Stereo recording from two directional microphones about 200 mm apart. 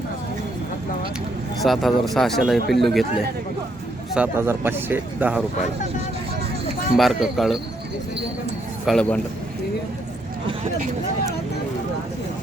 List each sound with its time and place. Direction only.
1.6 s speech: centre (ahead or behind)
4.1 s speech: 10° right (ahead or behind)
6.9 s speech: centre (ahead or behind)
8.9 s speech: 5° left (ahead or behind)